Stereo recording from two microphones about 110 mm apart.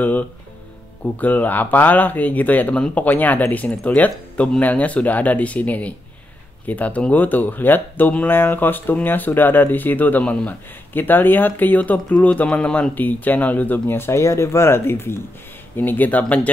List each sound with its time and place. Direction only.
1.2 s speech: 15° left (ahead or behind)